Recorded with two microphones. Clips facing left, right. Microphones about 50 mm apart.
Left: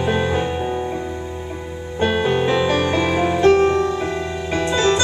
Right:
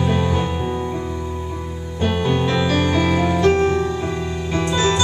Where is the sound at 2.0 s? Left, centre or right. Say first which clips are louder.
Left 2 dB; centre.